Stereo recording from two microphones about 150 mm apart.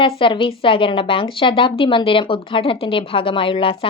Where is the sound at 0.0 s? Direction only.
35° left (ahead or behind).